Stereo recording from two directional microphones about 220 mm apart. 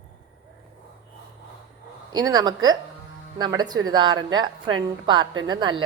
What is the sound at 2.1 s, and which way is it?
A woman's voice, 15° right (ahead or behind).